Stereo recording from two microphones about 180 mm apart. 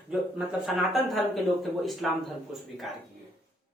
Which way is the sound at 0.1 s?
Centre (ahead or behind).